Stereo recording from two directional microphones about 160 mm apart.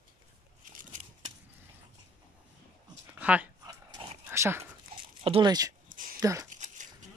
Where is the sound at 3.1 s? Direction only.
10° right (ahead or behind).